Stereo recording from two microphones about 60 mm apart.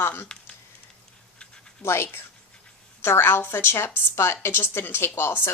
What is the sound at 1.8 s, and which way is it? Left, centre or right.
A woman's voice, left.